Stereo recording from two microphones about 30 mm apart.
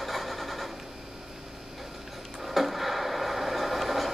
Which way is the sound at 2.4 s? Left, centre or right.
Centre.